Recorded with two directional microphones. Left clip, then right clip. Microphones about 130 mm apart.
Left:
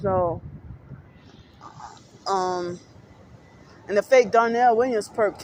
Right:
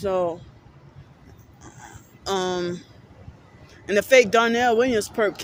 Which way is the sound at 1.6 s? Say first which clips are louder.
Left 3 dB; 55° right (ahead or behind).